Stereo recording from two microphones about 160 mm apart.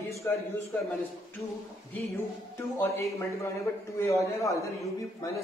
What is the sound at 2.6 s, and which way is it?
A man's voice, 15° left (ahead or behind).